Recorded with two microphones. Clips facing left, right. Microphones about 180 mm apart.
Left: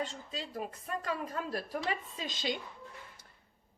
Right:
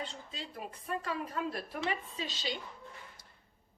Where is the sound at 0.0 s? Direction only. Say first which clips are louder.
Left 4 dB; 45° left (ahead or behind).